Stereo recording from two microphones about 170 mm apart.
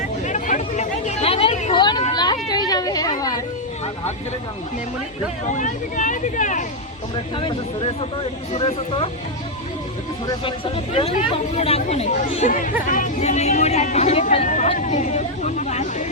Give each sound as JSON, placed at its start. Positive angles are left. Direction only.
{"t": 0.3, "sound": "a sound", "side_deg": 45}
{"t": 5.5, "sound": "speech", "side_deg": 45}
{"t": 7.3, "sound": "speech", "side_deg": 30}
{"t": 10.9, "sound": "speech", "side_deg": 40}